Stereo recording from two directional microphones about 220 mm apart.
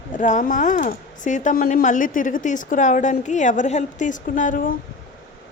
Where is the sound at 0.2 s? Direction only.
35° left (ahead or behind).